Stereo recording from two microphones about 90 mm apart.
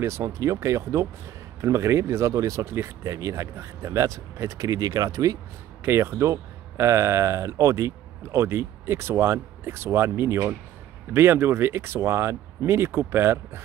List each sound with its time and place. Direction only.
0.0 s speech: 30° right (ahead or behind)
5.9 s speech: 30° right (ahead or behind)